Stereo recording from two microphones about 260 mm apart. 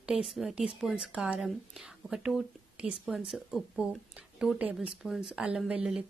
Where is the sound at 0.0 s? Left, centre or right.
Centre.